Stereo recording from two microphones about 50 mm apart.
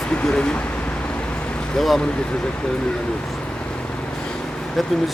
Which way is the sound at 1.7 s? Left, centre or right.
Centre.